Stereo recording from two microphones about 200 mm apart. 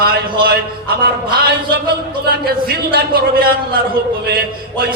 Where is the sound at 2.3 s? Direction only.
50° right (ahead or behind).